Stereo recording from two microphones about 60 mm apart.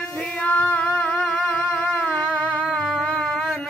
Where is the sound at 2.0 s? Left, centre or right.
Centre.